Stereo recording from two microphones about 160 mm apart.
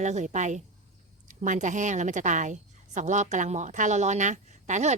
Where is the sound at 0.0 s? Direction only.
45° right (ahead or behind).